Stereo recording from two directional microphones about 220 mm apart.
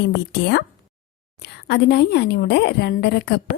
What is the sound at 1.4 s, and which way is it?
A woman's voice, 50° left (ahead or behind).